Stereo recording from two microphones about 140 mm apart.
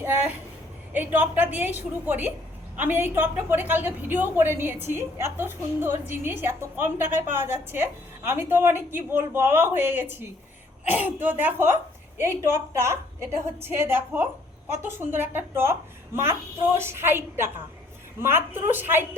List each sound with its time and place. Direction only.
0.0 s a woman's voice: 10° right (ahead or behind)